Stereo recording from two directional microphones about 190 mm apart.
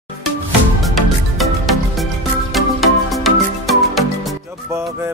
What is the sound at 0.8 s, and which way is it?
Music, centre (ahead or behind).